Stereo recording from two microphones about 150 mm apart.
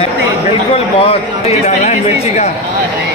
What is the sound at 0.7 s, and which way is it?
Speech, 40° left (ahead or behind).